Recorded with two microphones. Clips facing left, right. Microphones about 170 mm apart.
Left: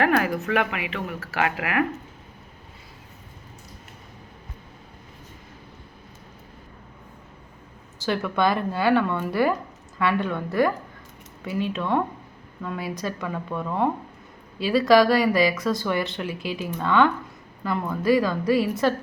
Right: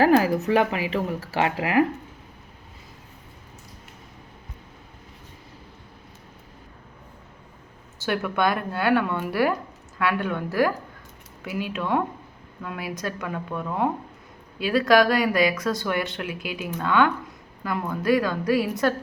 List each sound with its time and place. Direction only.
0.0 s speech: 30° right (ahead or behind)
8.0 s speech: 5° right (ahead or behind)